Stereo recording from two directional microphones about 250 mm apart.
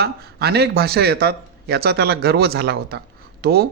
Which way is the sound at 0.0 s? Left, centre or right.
Right.